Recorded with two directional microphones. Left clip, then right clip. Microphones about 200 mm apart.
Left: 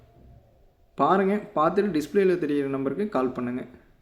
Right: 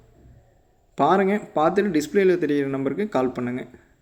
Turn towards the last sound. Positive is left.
turn(degrees=-15)  # may be behind; listen again after turning